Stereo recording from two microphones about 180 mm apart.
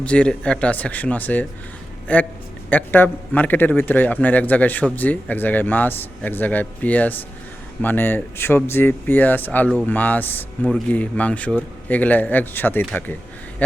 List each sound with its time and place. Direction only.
0.0 s speech: 5° left (ahead or behind)